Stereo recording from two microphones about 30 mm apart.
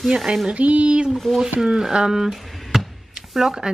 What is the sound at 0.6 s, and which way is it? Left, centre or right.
Speech, right.